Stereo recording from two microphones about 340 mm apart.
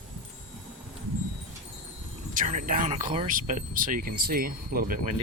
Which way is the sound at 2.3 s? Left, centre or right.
Right.